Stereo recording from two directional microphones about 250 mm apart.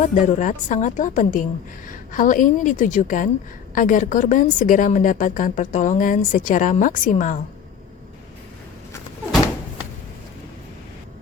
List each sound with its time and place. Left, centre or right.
0.1 s a woman's voice: left